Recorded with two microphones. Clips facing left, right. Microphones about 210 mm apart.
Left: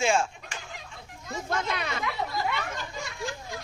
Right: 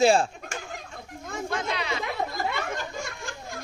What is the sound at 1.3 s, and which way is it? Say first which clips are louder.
Children playing: even; 55° right (ahead or behind).